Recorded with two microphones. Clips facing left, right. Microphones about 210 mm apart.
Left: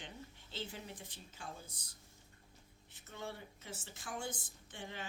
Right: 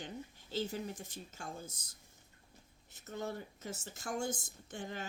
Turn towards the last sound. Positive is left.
turn(degrees=-45)  # may be behind; listen again after turning